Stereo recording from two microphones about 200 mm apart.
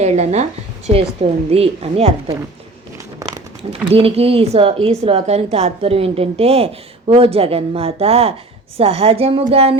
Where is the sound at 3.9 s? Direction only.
30° right (ahead or behind).